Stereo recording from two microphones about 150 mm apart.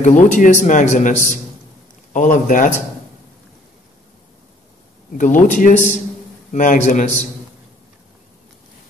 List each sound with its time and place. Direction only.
0.0 s a man's voice: 55° left (ahead or behind)
5.1 s a man's voice: 60° left (ahead or behind)